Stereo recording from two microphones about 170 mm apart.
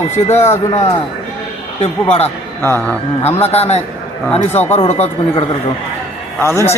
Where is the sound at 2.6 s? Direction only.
15° left (ahead or behind).